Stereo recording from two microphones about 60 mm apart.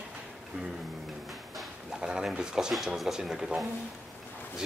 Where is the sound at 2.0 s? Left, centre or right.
Centre.